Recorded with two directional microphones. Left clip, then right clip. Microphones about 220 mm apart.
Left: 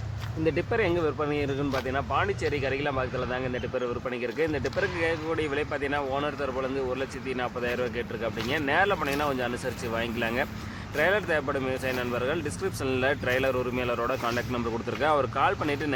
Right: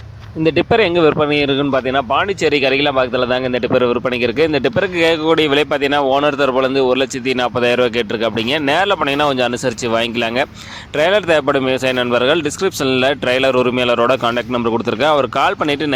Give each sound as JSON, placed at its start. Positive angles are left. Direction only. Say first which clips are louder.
{"t": 0.4, "sound": "speech", "louder": "right 13 dB", "side_deg": -45}